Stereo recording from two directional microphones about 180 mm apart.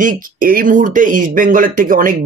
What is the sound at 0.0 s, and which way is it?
Speech, 50° right (ahead or behind).